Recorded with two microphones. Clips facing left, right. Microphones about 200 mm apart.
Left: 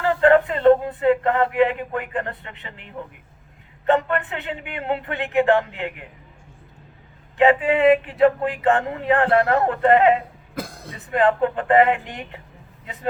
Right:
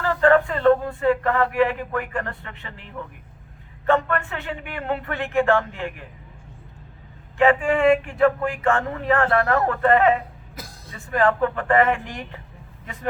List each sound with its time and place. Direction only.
0.0 s a sound: 20° left (ahead or behind)
3.8 s speech: 20° left (ahead or behind)
7.3 s speech: 20° left (ahead or behind)
10.5 s cough: 60° left (ahead or behind)
10.9 s speech: 20° left (ahead or behind)